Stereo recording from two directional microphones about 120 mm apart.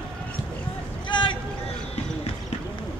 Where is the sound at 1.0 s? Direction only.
40° left (ahead or behind).